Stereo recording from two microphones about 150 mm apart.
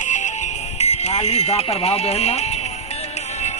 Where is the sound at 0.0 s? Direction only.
55° left (ahead or behind).